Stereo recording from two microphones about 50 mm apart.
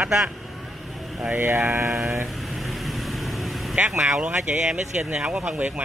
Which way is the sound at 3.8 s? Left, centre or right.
Centre.